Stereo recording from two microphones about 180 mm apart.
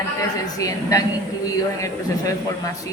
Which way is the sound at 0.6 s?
20° left (ahead or behind).